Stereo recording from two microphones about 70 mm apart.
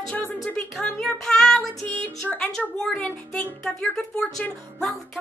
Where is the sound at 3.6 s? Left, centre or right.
Centre.